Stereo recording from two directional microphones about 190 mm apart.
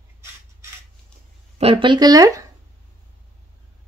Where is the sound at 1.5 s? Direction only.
30° right (ahead or behind).